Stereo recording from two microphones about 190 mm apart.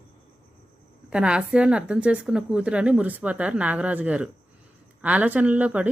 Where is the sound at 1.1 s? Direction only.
5° right (ahead or behind).